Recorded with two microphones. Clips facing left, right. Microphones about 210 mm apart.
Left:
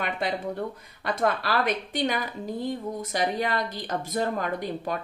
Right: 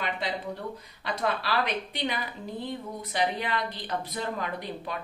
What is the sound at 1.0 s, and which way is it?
A woman's voice, 50° left (ahead or behind).